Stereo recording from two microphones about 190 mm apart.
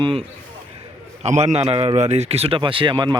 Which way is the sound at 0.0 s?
30° right (ahead or behind).